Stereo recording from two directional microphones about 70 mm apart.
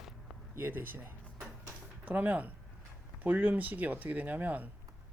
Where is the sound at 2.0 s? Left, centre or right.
Right.